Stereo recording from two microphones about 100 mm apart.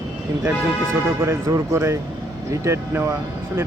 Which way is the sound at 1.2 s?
30° right (ahead or behind).